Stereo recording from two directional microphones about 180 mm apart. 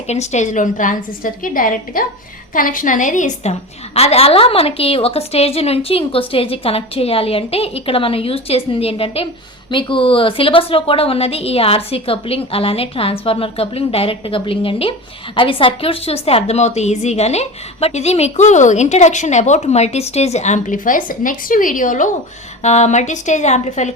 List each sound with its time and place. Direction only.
0.1 s a woman's voice: 40° left (ahead or behind)